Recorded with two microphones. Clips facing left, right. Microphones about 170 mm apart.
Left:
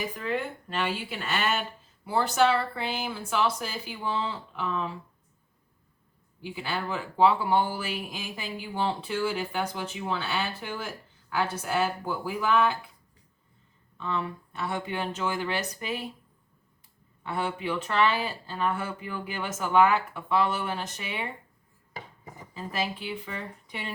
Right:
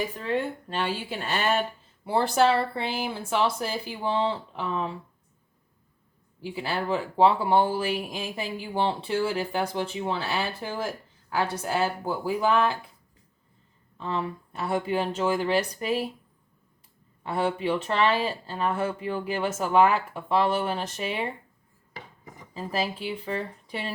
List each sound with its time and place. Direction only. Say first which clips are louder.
0.2 s speech: right 3 dB; 30° right (ahead or behind)
6.4 s speech: right 3 dB; 35° right (ahead or behind)
14.0 s speech: right 2 dB; 35° right (ahead or behind)
17.2 s speech: right 4 dB; 35° right (ahead or behind)
22.5 s speech: right 3 dB; 35° right (ahead or behind)